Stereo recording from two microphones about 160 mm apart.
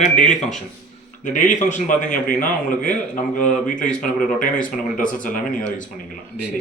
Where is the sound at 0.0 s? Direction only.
50° left (ahead or behind).